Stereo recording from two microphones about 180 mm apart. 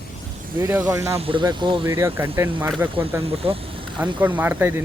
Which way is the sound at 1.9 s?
15° right (ahead or behind).